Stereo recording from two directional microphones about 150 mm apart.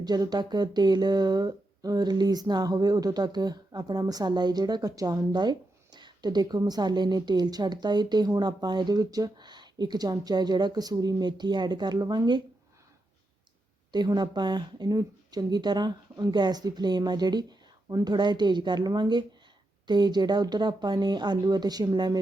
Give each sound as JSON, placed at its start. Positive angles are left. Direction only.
{"t": 0.0, "sound": "speech", "side_deg": -25}
{"t": 13.9, "sound": "speech", "side_deg": -30}